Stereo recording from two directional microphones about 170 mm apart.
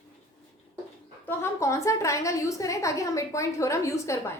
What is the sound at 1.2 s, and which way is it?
A woman's voice, 15° left (ahead or behind).